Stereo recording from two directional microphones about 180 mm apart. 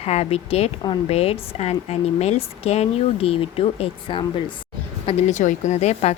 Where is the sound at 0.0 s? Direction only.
35° left (ahead or behind).